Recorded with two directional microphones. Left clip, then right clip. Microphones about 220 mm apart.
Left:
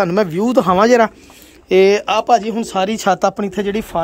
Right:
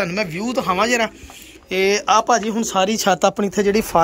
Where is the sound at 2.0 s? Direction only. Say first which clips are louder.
Left 2 dB; 10° left (ahead or behind).